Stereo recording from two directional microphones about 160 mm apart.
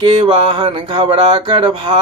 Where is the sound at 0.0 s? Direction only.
30° right (ahead or behind).